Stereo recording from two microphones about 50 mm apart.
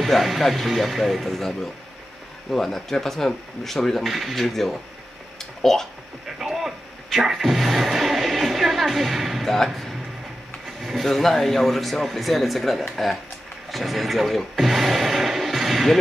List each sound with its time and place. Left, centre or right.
0.0 s speech: centre
5.4 s a sound: centre
6.2 s music: centre
10.8 s speech: centre